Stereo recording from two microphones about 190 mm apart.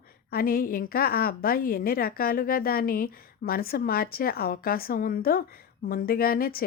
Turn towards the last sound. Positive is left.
turn(degrees=50)  # may be behind; listen again after turning